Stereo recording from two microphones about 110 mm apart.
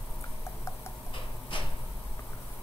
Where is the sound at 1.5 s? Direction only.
50° left (ahead or behind).